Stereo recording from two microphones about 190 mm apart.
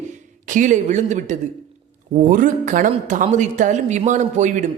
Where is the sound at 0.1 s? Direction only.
40° right (ahead or behind).